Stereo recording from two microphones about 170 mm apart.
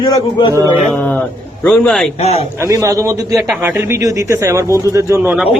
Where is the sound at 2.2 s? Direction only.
40° left (ahead or behind).